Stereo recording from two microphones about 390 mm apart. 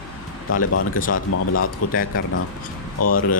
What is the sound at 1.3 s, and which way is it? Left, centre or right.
Speech, left.